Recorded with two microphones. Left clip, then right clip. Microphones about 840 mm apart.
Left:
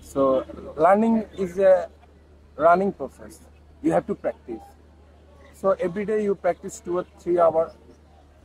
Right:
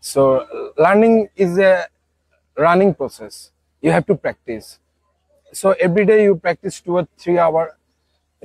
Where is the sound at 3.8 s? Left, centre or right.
Right.